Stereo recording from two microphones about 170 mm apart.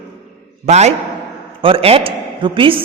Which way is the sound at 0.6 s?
40° right (ahead or behind).